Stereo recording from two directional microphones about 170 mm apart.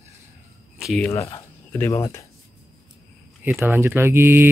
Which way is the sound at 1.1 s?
15° left (ahead or behind).